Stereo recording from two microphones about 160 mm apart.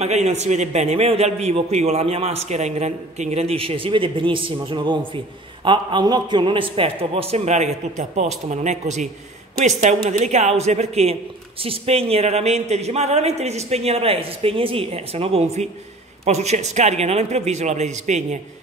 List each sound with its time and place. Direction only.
0.0 s a man's voice: 45° right (ahead or behind)